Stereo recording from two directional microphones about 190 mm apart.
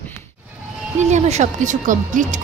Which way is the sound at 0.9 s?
35° right (ahead or behind).